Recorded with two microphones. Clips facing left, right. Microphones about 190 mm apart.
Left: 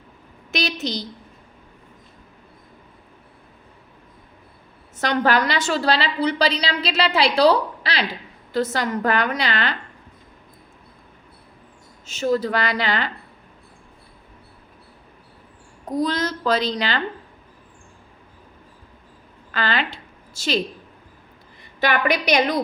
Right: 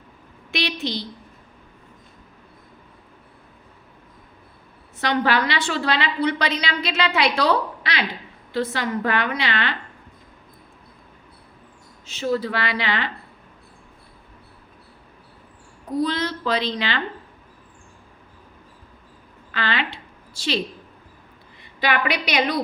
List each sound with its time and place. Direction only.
0.5 s a woman's voice: 40° left (ahead or behind)
4.9 s a woman's voice: 45° left (ahead or behind)
12.0 s a woman's voice: 45° left (ahead or behind)
15.9 s a woman's voice: 45° left (ahead or behind)
19.5 s a sound: 40° left (ahead or behind)
21.8 s a woman's voice: 45° left (ahead or behind)